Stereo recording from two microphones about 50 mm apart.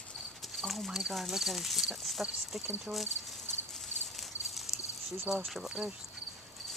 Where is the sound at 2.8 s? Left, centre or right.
Centre.